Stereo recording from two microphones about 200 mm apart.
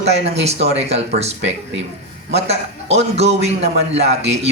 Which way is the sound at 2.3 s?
30° right (ahead or behind).